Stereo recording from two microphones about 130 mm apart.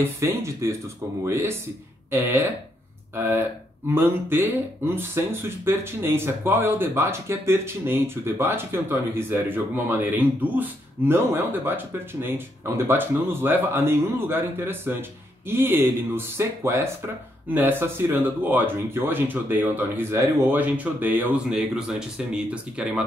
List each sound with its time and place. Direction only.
0.0 s speech: 20° right (ahead or behind)